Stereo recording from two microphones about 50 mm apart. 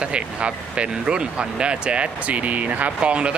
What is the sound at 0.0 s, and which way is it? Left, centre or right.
Speech, right.